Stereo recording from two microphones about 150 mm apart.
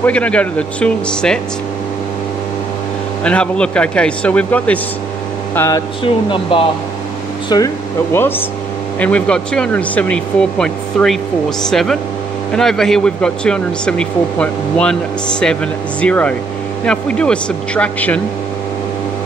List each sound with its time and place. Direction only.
0.0 s speech: 10° left (ahead or behind)
3.3 s speech: 5° left (ahead or behind)
5.5 s mains hum: 15° left (ahead or behind)
6.0 s speech: 35° left (ahead or behind)
7.4 s speech: 25° left (ahead or behind)
9.0 s speech: 10° left (ahead or behind)